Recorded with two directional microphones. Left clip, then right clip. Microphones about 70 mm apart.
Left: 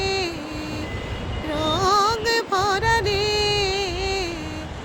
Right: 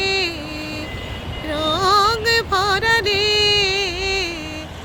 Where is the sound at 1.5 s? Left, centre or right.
Right.